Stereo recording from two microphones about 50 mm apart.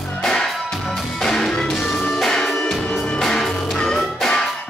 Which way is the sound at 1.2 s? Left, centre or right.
Centre.